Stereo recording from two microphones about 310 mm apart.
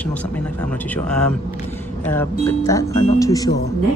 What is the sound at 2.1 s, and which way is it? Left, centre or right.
Speech, centre.